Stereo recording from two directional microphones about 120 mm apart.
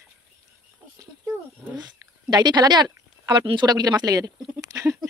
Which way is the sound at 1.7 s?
35° right (ahead or behind).